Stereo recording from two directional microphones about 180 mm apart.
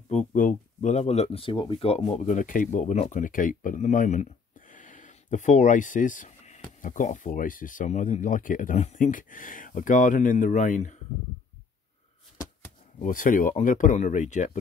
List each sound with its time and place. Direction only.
0.1 s speech: 45° left (ahead or behind)
13.0 s speech: 50° left (ahead or behind)